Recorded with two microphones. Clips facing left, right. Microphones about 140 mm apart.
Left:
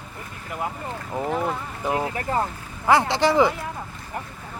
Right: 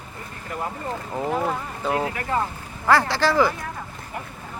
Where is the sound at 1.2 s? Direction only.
5° right (ahead or behind).